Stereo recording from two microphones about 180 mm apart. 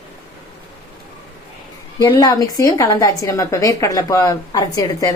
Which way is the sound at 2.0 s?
20° left (ahead or behind).